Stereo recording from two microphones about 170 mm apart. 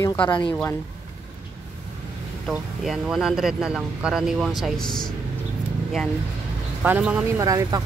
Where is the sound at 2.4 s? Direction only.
Centre (ahead or behind).